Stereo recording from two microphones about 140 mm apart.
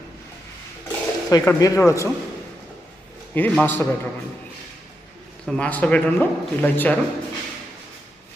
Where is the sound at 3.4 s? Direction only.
10° left (ahead or behind).